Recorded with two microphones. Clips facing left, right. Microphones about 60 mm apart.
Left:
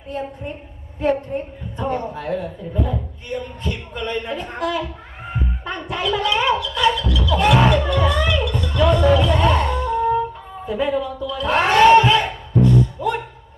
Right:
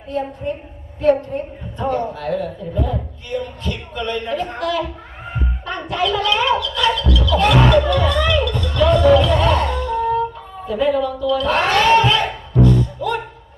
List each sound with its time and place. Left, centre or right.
0.1 s a woman's voice: centre
13.0 s music: left